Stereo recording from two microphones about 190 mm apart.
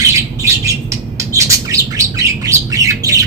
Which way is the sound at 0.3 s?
15° right (ahead or behind).